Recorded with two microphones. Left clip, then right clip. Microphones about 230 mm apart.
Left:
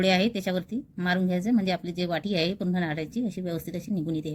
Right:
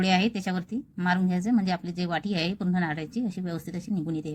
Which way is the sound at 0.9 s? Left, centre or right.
Centre.